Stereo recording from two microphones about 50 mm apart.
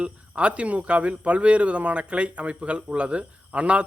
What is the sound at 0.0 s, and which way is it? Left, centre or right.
A man's voice, right.